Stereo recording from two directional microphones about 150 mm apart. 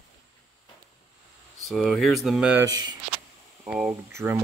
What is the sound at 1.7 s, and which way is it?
Speech, 5° left (ahead or behind).